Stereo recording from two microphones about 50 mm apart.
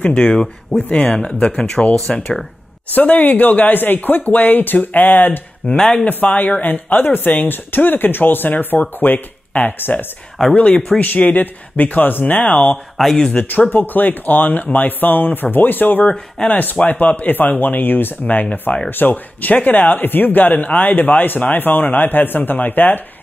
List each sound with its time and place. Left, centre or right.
0.1 s speech: centre
2.0 s speech: centre
2.9 s speech: left
5.8 s speech: centre
6.0 s speech: left
10.5 s speech: left
12.9 s speech: centre
13.3 s speech: left
16.1 s speech: left
16.8 s speech: left